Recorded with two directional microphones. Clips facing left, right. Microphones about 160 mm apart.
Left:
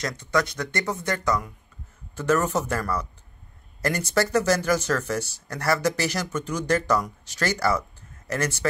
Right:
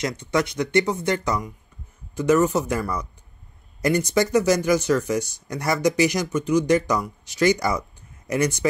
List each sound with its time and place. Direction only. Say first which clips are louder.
0.0 s speech: right 2 dB; 20° right (ahead or behind)